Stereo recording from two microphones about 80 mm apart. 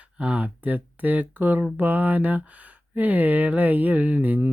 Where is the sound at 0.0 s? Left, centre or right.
Centre.